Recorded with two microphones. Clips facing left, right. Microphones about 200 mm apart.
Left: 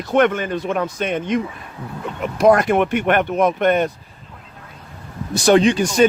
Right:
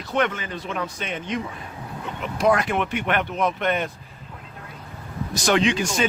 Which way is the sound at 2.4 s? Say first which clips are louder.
Left 7 dB; 45° left (ahead or behind).